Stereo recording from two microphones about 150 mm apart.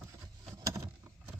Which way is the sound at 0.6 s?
20° right (ahead or behind).